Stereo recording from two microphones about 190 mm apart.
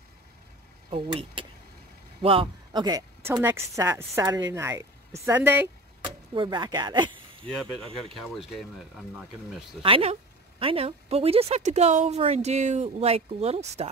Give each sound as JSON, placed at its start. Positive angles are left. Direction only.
{"t": 0.8, "sound": "speech", "side_deg": -25}
{"t": 6.0, "sound": "speech", "side_deg": -25}
{"t": 7.4, "sound": "speech", "side_deg": 5}
{"t": 9.8, "sound": "a woman's voice", "side_deg": -30}